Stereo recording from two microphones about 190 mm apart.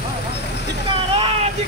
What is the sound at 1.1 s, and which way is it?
Vehicle, 30° right (ahead or behind).